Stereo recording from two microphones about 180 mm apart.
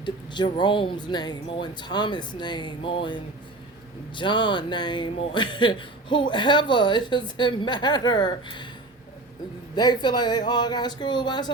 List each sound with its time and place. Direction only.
0.0 s a man's voice: 25° left (ahead or behind)
9.7 s a man's voice: 25° left (ahead or behind)